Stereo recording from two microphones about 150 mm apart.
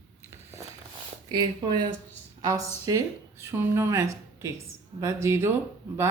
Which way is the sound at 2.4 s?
20° right (ahead or behind).